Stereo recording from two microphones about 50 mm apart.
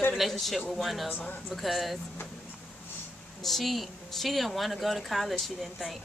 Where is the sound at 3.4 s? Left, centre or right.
Centre.